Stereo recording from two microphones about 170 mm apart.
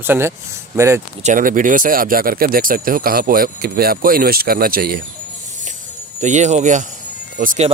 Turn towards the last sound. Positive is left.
turn(degrees=-50)  # may be behind; listen again after turning